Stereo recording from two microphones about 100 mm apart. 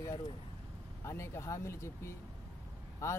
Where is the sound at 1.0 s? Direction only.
25° left (ahead or behind).